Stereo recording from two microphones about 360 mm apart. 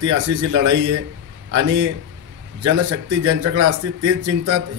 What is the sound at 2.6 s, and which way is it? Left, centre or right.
A man's voice, right.